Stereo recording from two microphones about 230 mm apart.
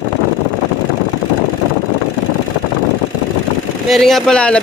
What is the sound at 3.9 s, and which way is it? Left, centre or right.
Speech, centre.